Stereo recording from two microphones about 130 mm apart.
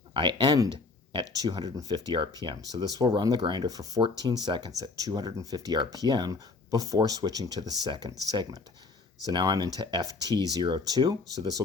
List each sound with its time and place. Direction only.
0.1 s speech: 35° right (ahead or behind)